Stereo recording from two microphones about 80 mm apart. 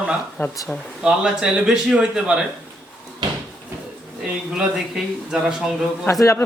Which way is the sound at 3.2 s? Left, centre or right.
Right.